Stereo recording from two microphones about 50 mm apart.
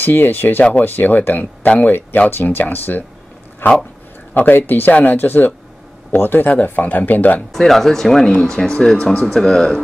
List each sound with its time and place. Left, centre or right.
0.0 s speech: left
7.5 s speech: centre